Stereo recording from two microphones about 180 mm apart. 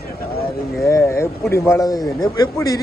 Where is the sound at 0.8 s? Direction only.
15° left (ahead or behind).